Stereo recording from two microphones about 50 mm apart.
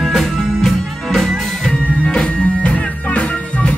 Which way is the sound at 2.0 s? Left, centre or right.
Left.